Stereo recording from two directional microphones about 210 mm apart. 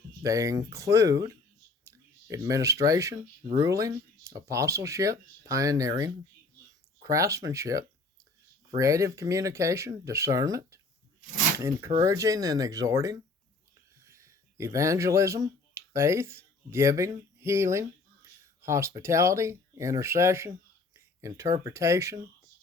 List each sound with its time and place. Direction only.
0.2 s speech: 15° right (ahead or behind)